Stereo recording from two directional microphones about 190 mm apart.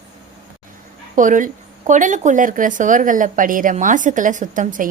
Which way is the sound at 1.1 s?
45° right (ahead or behind).